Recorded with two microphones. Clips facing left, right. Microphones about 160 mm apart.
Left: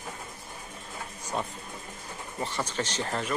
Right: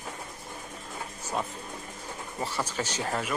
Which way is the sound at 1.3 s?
Centre (ahead or behind).